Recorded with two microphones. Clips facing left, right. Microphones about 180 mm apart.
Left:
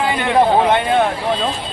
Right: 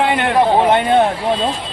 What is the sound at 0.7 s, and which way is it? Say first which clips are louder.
Speech: right 2 dB; 35° right (ahead or behind).